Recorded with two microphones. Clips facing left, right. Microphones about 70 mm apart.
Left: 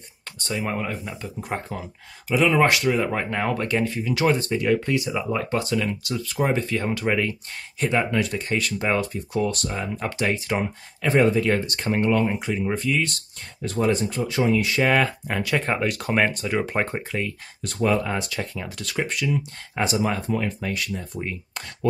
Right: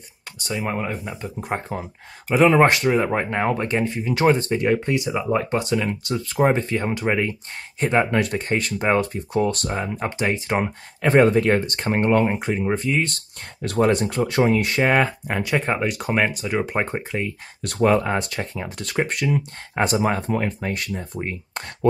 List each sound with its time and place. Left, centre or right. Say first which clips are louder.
0.5 s speech: right 1 dB; centre
1.0 s speech: right 3 dB; right
2.2 s speech: right 4 dB; right
5.9 s speech: right 2 dB; right
7.8 s speech: right 3 dB; right
10.5 s speech: right 3 dB; right
13.1 s speech: right 1 dB; right
14.8 s speech: right 2 dB; right
17.6 s speech: right 4 dB; right